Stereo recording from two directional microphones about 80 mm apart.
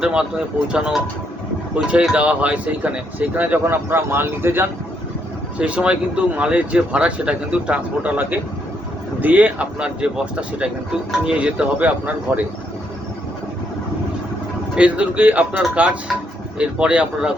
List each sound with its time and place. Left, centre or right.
0.0 s speech: centre; by 4.7 s right
5.5 s speech: centre
11.3 s speech: centre
14.8 s speech: centre